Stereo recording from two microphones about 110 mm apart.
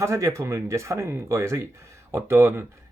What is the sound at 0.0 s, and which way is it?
Speech, 25° right (ahead or behind).